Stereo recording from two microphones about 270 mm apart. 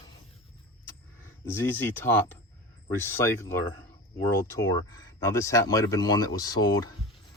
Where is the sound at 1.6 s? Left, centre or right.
Centre.